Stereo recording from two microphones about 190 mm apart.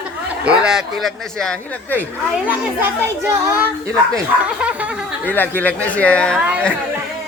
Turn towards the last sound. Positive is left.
turn(degrees=5)  # may be behind; listen again after turning